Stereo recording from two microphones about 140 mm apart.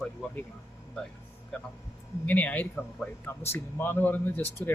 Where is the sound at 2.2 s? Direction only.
10° left (ahead or behind).